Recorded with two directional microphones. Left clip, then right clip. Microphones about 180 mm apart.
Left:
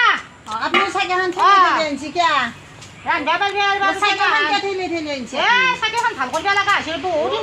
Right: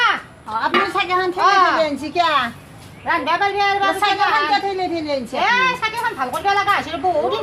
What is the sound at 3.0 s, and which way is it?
Speech, 45° right (ahead or behind).